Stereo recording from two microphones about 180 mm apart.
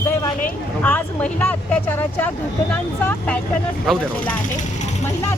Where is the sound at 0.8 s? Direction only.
10° left (ahead or behind).